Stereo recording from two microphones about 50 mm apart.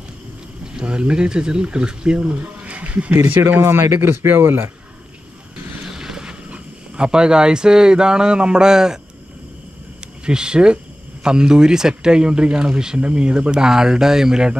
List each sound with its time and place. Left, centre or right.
0.7 s speech: centre; by 3.6 s right
3.6 s speech: right
4.0 s speech: right
5.9 s vehicle: centre
6.5 s speech: centre
10.2 s speech: centre